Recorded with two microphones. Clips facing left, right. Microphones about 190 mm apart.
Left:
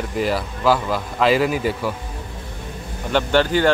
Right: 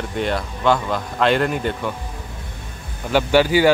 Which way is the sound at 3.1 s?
10° right (ahead or behind).